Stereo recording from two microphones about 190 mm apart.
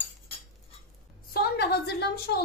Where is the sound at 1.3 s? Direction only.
55° left (ahead or behind).